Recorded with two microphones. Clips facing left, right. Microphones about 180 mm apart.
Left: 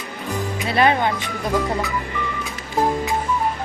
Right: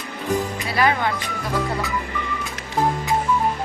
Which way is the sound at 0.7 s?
25° left (ahead or behind).